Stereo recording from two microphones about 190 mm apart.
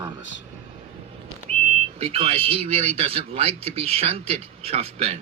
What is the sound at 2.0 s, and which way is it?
A man's voice, 30° right (ahead or behind).